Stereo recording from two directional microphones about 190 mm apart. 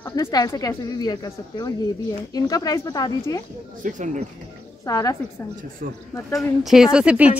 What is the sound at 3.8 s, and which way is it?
Speech, 40° right (ahead or behind).